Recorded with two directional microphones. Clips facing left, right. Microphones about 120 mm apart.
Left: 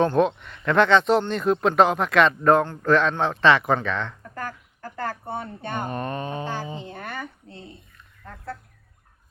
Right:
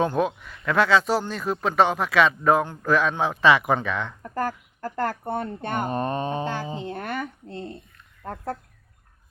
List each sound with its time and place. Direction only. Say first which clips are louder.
0.0 s speech: left 3 dB; 5° right (ahead or behind)
4.4 s a sound: right 7 dB; 40° right (ahead or behind)
5.0 s speech: right 2 dB; 55° right (ahead or behind)
5.9 s speech: right 3 dB; 30° right (ahead or behind)
6.8 s a sound: right 4 dB; 60° right (ahead or behind)
8.2 s speech: right 5 dB; 45° right (ahead or behind)